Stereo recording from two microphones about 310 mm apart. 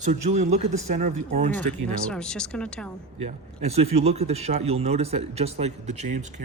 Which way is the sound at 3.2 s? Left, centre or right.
Right.